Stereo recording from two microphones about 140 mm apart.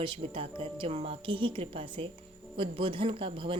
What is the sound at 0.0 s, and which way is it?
A woman's voice, 40° right (ahead or behind).